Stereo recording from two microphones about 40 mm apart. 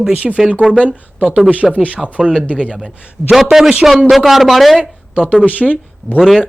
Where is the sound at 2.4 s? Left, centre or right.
Left.